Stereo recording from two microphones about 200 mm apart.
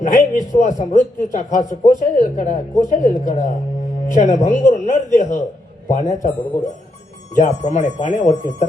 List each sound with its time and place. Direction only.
0.0 s a sound: 40° left (ahead or behind)
0.6 s speech: 40° left (ahead or behind)
7.3 s speech: 35° left (ahead or behind)